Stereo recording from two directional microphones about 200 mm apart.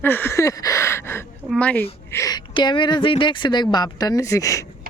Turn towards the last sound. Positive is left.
turn(degrees=15)  # may be behind; listen again after turning